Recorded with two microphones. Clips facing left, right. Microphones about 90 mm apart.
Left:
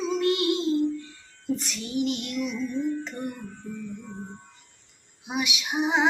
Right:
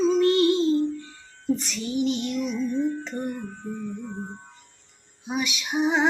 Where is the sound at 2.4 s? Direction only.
40° right (ahead or behind).